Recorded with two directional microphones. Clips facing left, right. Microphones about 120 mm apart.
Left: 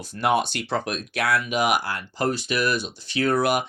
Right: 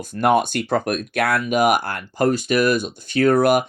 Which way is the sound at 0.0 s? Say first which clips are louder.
Right 5 dB; 50° right (ahead or behind).